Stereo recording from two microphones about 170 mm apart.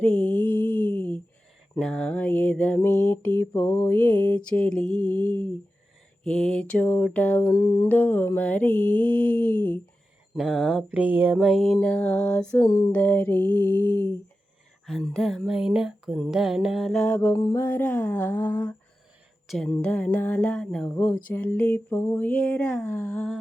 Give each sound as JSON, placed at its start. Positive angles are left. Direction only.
{"t": 0.0, "sound": "mantra", "side_deg": 5}
{"t": 10.3, "sound": "speech", "side_deg": 0}
{"t": 11.3, "sound": "mantra", "side_deg": 0}
{"t": 14.8, "sound": "a sound", "side_deg": 0}
{"t": 17.4, "sound": "mantra", "side_deg": 15}
{"t": 19.5, "sound": "a sound", "side_deg": 5}
{"t": 19.7, "sound": "mantra", "side_deg": 10}